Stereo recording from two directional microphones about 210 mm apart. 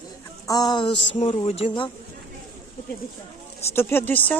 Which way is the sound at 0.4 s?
20° left (ahead or behind).